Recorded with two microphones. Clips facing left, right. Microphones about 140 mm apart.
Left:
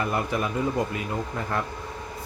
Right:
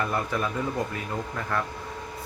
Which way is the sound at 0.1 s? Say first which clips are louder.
Left 2 dB; 15° left (ahead or behind).